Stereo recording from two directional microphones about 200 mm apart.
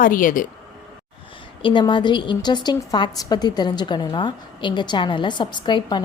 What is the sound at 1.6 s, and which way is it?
A woman's voice, 25° left (ahead or behind).